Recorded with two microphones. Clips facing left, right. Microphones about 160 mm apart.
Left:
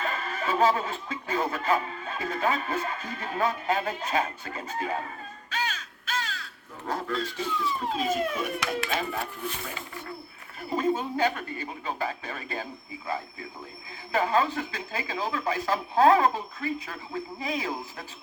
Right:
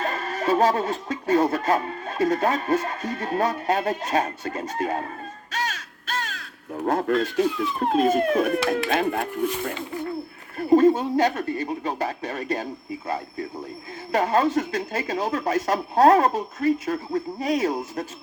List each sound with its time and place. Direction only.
0.0 s speech: 40° right (ahead or behind)
6.1 s crow: 50° right (ahead or behind)
6.8 s speech: 55° right (ahead or behind)
10.7 s speech: 45° right (ahead or behind)